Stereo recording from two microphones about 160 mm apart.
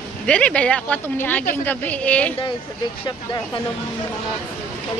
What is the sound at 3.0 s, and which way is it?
Speech, 30° left (ahead or behind).